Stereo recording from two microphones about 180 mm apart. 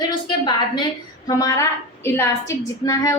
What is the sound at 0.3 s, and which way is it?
A woman's voice, 25° left (ahead or behind).